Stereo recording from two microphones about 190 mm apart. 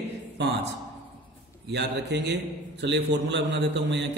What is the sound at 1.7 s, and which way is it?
A man's voice, 65° right (ahead or behind).